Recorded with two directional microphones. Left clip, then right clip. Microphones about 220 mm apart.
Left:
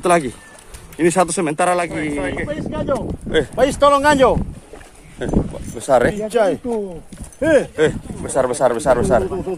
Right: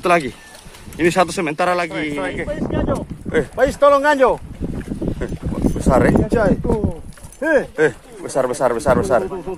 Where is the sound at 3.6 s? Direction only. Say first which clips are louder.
Right 1 dB; 40° left (ahead or behind).